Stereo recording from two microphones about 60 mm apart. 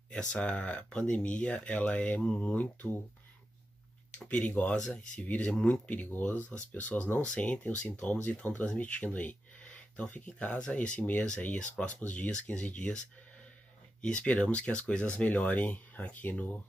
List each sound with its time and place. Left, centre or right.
0.3 s speech: centre
4.1 s speech: left
14.0 s speech: centre